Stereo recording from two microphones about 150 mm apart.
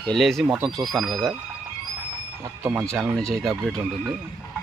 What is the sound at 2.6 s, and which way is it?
Speech, 15° right (ahead or behind).